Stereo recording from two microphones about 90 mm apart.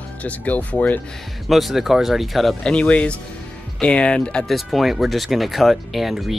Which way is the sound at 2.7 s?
10° left (ahead or behind).